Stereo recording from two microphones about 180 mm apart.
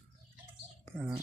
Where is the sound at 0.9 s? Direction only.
10° right (ahead or behind).